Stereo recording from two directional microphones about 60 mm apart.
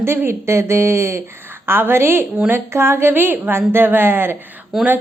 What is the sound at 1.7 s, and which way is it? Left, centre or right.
A woman's voice, right.